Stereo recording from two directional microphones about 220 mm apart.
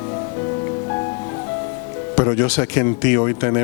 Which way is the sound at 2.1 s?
25° left (ahead or behind).